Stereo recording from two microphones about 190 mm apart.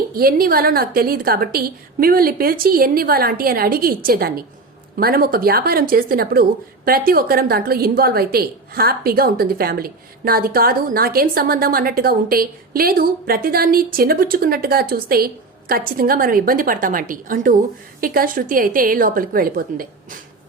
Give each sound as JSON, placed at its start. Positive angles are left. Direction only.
{"t": 0.1, "sound": "a woman's voice", "side_deg": -50}